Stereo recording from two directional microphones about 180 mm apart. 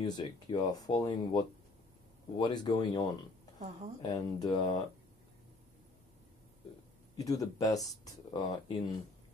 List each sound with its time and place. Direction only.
0.0 s speech: 25° left (ahead or behind)
3.5 s speech: 40° right (ahead or behind)
4.0 s speech: 20° left (ahead or behind)
7.2 s speech: 20° left (ahead or behind)